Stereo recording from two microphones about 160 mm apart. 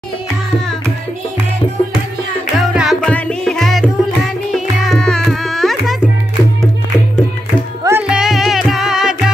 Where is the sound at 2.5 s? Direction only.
Centre (ahead or behind).